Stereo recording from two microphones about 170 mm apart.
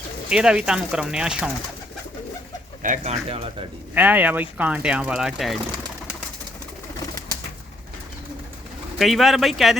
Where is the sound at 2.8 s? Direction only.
45° right (ahead or behind).